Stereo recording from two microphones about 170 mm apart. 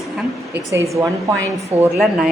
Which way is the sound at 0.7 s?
15° right (ahead or behind).